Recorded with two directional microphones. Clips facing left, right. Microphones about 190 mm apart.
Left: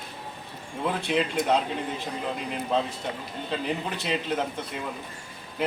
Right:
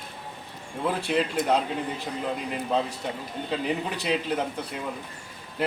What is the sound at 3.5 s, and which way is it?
Speech, 5° right (ahead or behind).